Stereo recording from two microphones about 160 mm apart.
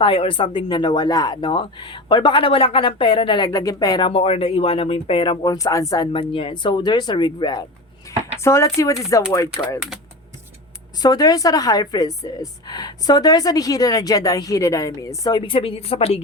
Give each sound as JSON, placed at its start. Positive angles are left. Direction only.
{"t": 0.0, "sound": "speech", "side_deg": 35}
{"t": 11.0, "sound": "speech", "side_deg": 25}